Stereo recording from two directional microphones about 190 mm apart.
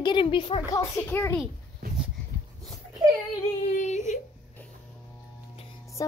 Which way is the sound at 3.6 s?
40° left (ahead or behind).